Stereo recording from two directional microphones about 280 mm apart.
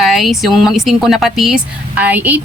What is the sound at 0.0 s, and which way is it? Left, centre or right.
Speech, centre.